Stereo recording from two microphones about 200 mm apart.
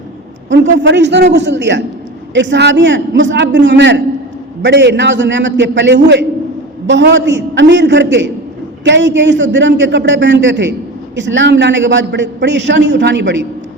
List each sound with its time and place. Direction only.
0.5 s a man's voice: 65° right (ahead or behind)